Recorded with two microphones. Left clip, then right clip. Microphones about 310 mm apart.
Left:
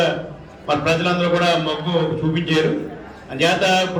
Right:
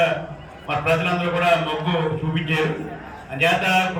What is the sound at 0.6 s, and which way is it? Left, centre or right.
A man's voice, left.